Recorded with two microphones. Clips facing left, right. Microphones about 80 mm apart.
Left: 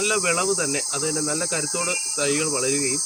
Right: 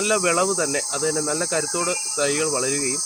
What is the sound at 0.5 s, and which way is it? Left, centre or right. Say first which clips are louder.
Cricket: right 2 dB; right.